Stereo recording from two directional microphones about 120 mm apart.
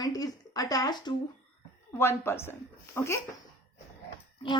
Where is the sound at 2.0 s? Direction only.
20° left (ahead or behind).